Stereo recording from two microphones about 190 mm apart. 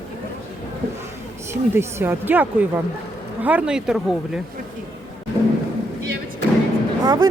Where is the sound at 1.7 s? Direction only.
15° right (ahead or behind).